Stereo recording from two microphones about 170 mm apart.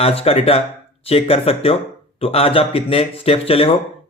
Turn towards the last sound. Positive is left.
turn(degrees=35)  # may be behind; listen again after turning